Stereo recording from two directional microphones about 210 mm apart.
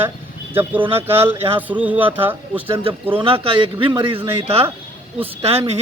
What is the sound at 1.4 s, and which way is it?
Speech, 25° right (ahead or behind).